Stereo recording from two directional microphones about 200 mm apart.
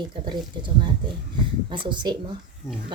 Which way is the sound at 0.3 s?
25° right (ahead or behind).